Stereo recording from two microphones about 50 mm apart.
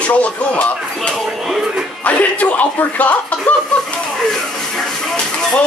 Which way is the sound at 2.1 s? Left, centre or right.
Left.